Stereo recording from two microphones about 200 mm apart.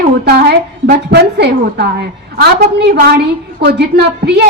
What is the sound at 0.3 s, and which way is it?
A woman's voice, 55° right (ahead or behind).